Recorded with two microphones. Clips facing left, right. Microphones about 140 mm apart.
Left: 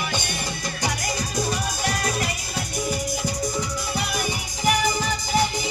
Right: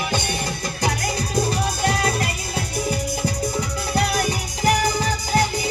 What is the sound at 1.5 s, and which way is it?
Music, 30° right (ahead or behind).